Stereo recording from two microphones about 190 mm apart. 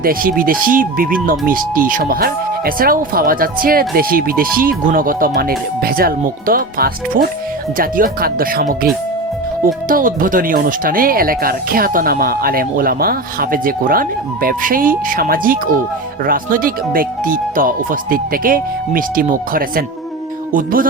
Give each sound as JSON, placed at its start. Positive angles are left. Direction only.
{"t": 0.0, "sound": "speech", "side_deg": -50}
{"t": 9.9, "sound": "speech", "side_deg": -50}